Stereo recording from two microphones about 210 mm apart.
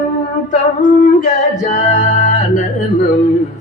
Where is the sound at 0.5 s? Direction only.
35° left (ahead or behind).